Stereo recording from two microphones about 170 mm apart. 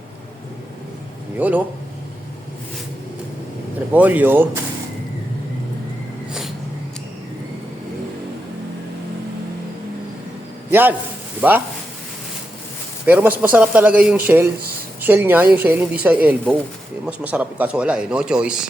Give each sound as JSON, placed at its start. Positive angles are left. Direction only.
{"t": 1.4, "sound": "speech", "side_deg": -10}
{"t": 3.9, "sound": "speech", "side_deg": -10}
{"t": 10.7, "sound": "a man's voice", "side_deg": -10}
{"t": 13.1, "sound": "speech", "side_deg": -10}